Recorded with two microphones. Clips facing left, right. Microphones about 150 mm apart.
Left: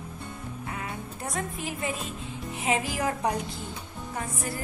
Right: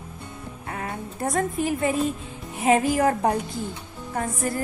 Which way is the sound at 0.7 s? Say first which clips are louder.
Right 7 dB; 50° right (ahead or behind).